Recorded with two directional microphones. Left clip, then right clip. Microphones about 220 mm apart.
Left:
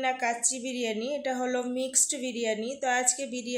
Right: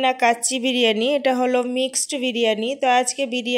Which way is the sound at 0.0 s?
35° right (ahead or behind).